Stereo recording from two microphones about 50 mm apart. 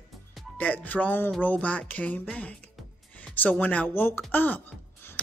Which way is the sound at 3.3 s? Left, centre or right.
Left.